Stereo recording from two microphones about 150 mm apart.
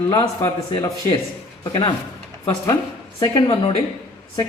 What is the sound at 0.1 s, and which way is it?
Speech, 25° left (ahead or behind).